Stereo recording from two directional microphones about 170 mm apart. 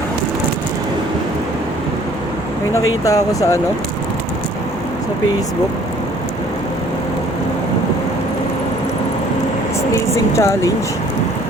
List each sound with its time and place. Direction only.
2.7 s speech: 20° left (ahead or behind)
9.9 s speech: 15° left (ahead or behind)